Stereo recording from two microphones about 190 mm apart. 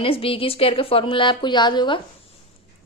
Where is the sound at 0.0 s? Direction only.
30° left (ahead or behind).